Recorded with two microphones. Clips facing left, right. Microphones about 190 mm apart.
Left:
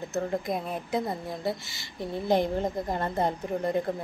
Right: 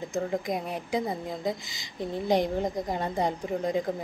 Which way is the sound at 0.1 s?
10° right (ahead or behind).